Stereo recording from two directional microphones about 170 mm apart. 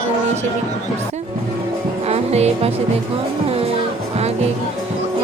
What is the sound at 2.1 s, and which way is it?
Music, 40° right (ahead or behind).